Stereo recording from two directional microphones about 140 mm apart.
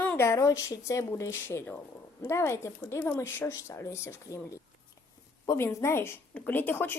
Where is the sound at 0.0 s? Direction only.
15° left (ahead or behind).